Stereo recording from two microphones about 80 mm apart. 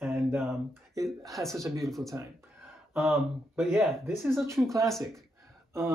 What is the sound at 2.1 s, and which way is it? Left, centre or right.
Speech, right.